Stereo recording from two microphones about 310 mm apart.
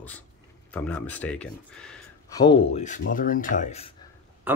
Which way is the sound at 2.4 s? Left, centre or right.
Centre.